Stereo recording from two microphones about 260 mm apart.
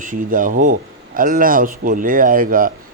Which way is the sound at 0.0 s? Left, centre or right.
Right.